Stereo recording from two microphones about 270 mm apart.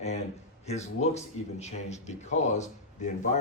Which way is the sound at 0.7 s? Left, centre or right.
Left.